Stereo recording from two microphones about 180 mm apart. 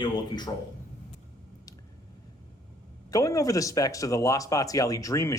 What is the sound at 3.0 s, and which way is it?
A man's voice, 20° left (ahead or behind).